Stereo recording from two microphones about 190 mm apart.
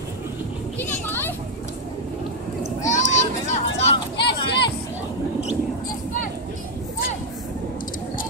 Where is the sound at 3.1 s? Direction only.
35° left (ahead or behind).